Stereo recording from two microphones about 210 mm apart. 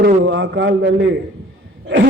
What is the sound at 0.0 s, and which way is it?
A man's voice, 60° right (ahead or behind).